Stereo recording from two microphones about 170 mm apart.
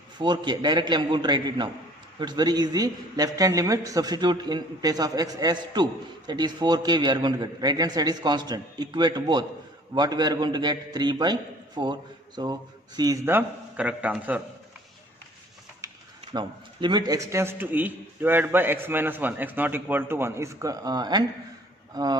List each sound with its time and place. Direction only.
0.2 s a man's voice: 25° right (ahead or behind); by 14.4 s 10° right (ahead or behind)
16.3 s a man's voice: 25° right (ahead or behind)